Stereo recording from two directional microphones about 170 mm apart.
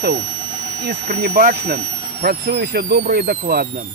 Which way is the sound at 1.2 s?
60° right (ahead or behind).